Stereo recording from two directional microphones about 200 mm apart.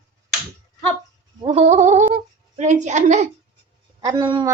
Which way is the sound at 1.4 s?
30° right (ahead or behind).